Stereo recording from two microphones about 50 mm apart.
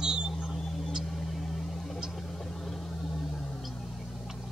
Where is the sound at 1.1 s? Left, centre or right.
Centre.